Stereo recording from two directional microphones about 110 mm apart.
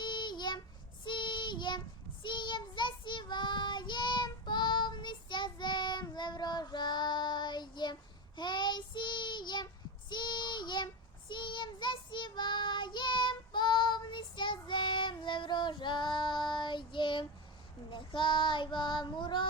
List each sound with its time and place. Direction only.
0.0 s child singing: 45° left (ahead or behind)